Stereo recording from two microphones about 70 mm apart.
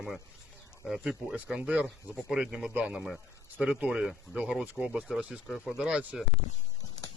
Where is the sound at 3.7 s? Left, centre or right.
Centre.